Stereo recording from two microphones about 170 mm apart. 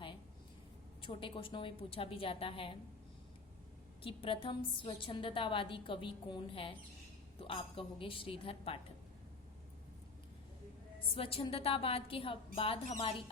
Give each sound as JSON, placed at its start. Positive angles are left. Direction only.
{"t": 1.0, "sound": "a woman's voice", "side_deg": 30}
{"t": 4.0, "sound": "a woman's voice", "side_deg": 30}
{"t": 11.1, "sound": "a woman's voice", "side_deg": 35}